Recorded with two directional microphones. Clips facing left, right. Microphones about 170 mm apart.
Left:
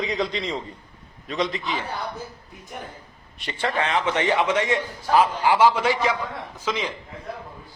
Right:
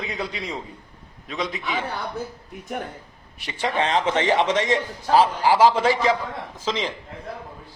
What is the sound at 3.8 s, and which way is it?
A man's voice, 35° right (ahead or behind).